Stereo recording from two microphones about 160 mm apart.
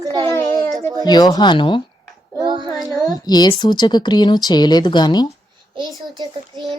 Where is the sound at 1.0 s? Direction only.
25° left (ahead or behind).